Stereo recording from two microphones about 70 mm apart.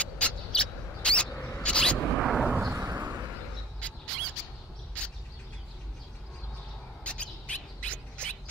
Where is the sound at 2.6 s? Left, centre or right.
Right.